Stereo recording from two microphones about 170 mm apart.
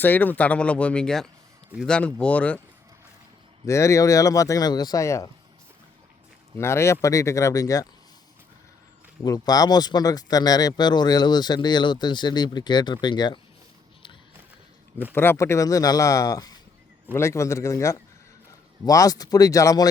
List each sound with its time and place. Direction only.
0.0 s speech: 10° left (ahead or behind)
3.7 s speech: 15° left (ahead or behind)
6.6 s speech: 15° left (ahead or behind)
9.2 s speech: 20° left (ahead or behind)
15.1 s speech: 15° left (ahead or behind)